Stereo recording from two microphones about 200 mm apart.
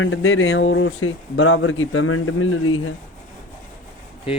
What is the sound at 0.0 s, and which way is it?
Speech, 80° left.